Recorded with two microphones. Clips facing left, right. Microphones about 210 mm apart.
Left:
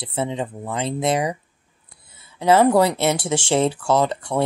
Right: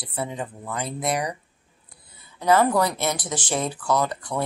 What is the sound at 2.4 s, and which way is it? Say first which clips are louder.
Speech: left 4 dB; 25° left (ahead or behind).